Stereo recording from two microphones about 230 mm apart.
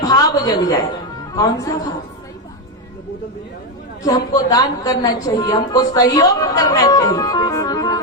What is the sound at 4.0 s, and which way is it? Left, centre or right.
A woman's voice, centre.